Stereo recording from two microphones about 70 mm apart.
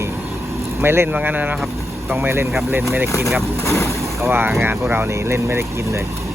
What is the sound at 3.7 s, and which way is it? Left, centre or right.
Speech, left.